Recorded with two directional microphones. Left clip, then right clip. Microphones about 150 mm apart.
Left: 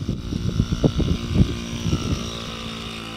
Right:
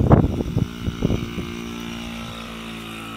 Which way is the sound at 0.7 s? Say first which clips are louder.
Left 3 dB; 30° left (ahead or behind).